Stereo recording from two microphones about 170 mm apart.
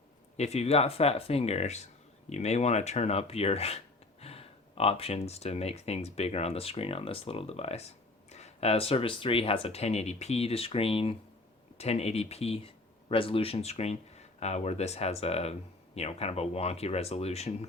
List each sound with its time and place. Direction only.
0.3 s speech: 40° left (ahead or behind)